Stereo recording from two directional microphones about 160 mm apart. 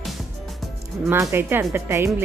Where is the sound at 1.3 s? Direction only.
15° right (ahead or behind).